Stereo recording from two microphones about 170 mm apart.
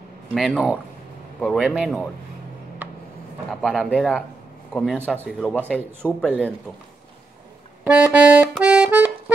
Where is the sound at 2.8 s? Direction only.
10° right (ahead or behind).